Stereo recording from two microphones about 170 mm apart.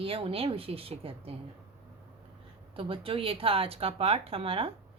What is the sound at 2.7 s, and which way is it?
Speech, 30° right (ahead or behind).